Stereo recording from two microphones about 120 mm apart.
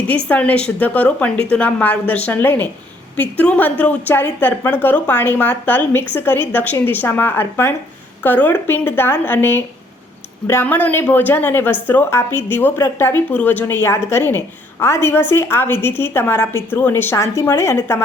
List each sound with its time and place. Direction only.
0.3 s a woman's voice: 10° left (ahead or behind)